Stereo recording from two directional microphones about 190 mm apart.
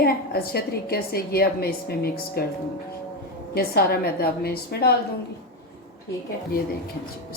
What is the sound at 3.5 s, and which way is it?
A woman's voice, 55° left (ahead or behind).